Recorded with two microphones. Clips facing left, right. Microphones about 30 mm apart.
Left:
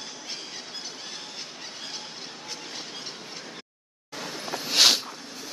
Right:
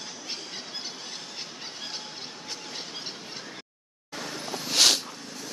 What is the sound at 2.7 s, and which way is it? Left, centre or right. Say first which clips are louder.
Train: even; centre.